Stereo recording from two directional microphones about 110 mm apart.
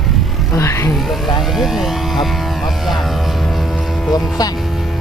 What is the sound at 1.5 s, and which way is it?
Speech, centre (ahead or behind).